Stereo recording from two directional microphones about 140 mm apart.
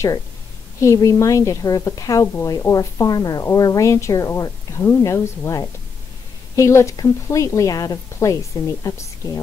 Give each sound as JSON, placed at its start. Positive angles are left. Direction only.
{"t": 0.7, "sound": "a woman's voice", "side_deg": 20}